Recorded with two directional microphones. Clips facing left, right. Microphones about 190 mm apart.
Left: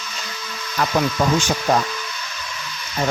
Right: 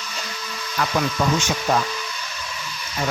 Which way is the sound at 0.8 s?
40° left (ahead or behind).